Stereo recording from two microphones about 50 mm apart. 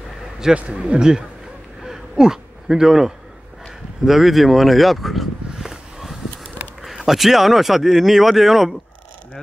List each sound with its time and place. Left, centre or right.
0.6 s a man's voice: right
1.9 s a sound: centre
4.0 s speech: centre